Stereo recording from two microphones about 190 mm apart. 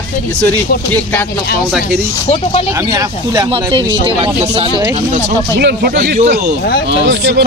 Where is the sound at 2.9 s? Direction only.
20° right (ahead or behind).